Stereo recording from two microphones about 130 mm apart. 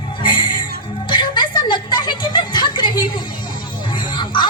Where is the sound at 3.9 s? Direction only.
35° left (ahead or behind).